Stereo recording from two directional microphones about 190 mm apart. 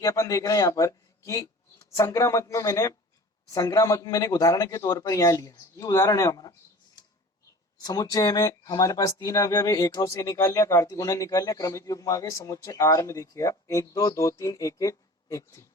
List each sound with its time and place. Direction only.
0.0 s a man's voice: 15° left (ahead or behind)
7.8 s speech: 20° left (ahead or behind)